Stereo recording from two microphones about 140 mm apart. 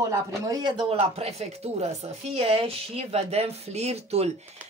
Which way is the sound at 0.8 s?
45° right (ahead or behind).